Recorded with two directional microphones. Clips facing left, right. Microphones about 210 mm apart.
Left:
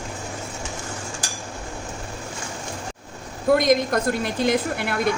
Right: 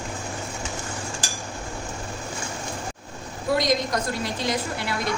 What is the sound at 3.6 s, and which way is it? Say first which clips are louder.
A woman's voice: left 4 dB; 55° left (ahead or behind).